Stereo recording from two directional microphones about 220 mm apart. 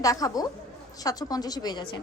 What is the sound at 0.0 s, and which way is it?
A woman's voice, 15° left (ahead or behind).